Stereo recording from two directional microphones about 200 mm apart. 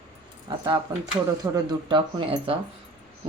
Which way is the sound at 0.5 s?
20° right (ahead or behind).